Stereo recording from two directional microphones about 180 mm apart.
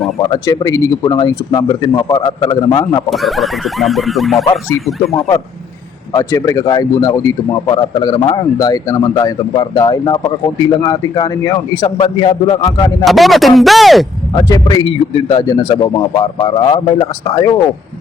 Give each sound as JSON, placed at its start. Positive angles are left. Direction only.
{"t": 0.2, "sound": "a man's voice", "side_deg": 20}
{"t": 3.1, "sound": "speech", "side_deg": 0}
{"t": 6.1, "sound": "a man's voice", "side_deg": 20}
{"t": 13.1, "sound": "speech", "side_deg": 0}
{"t": 14.3, "sound": "a man's voice", "side_deg": 20}